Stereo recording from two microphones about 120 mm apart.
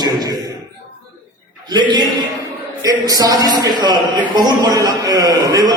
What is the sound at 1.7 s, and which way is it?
A man's voice, 35° right (ahead or behind).